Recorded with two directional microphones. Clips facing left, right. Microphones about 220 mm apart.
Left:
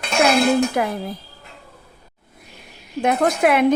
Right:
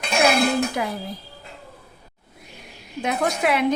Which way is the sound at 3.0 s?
55° left (ahead or behind).